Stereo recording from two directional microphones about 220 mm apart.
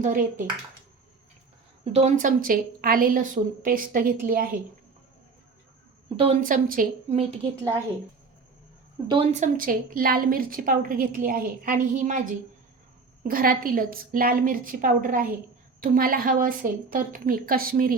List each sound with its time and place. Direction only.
0.0 s a woman's voice: 35° right (ahead or behind)
1.8 s a woman's voice: 30° right (ahead or behind)
6.1 s speech: 30° right (ahead or behind)
9.0 s a woman's voice: 30° right (ahead or behind)